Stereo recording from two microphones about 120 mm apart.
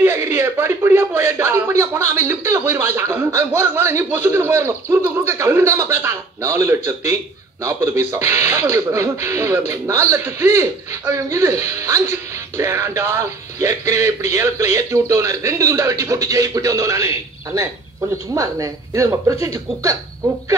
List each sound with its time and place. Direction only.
0.0 s a man's voice: 20° right (ahead or behind)
18.3 s a man's voice: 25° right (ahead or behind)